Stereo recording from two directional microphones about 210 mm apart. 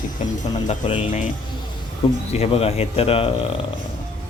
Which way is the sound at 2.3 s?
30° left (ahead or behind).